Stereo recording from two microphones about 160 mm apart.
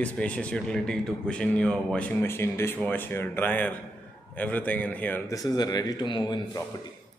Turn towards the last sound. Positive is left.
turn(degrees=25)  # may be behind; listen again after turning